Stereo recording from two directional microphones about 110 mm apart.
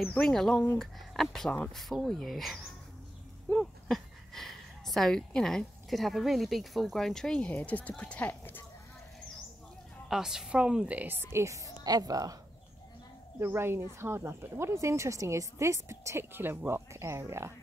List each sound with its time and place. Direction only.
0.0 s speech: 10° left (ahead or behind)
10.0 s a woman's voice: 5° right (ahead or behind); by 12.4 s 35° right (ahead or behind)
13.4 s a woman's voice: 20° right (ahead or behind)